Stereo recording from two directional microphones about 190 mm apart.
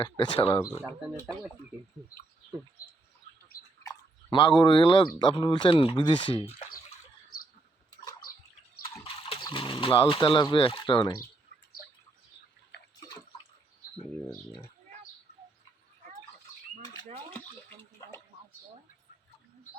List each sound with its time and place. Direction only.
0.2 s speech: 25° left (ahead or behind)
0.8 s speech: centre (ahead or behind)
3.8 s speech: 25° left (ahead or behind)
9.0 s speech: 30° left (ahead or behind)
13.0 s drip: 20° left (ahead or behind)